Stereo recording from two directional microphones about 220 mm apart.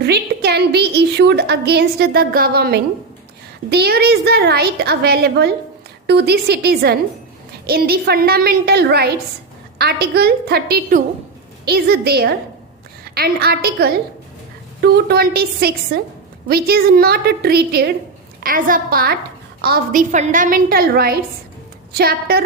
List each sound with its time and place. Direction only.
0.0 s a woman's voice: 50° right (ahead or behind)